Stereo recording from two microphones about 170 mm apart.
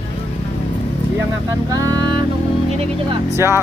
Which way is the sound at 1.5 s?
20° right (ahead or behind).